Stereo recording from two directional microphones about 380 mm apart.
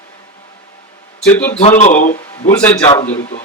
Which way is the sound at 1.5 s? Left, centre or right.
Centre.